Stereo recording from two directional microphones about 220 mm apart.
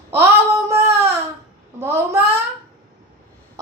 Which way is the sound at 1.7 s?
10° right (ahead or behind).